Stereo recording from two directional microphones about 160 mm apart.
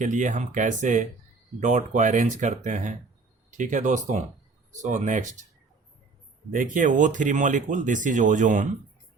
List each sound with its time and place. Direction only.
0.0 s speech: 50° right (ahead or behind)
6.5 s speech: 55° right (ahead or behind)